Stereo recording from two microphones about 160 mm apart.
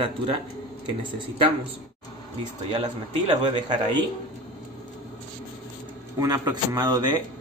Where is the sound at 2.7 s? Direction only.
30° right (ahead or behind).